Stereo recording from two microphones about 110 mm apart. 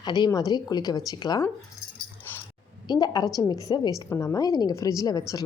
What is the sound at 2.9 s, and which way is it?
Speech, 35° left (ahead or behind).